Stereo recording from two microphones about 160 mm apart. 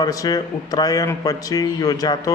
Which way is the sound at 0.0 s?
25° left (ahead or behind).